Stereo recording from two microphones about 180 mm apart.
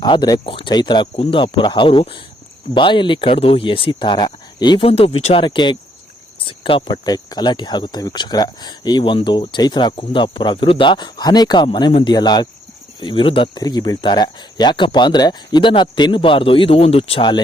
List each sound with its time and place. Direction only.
0.0 s speech: 25° left (ahead or behind)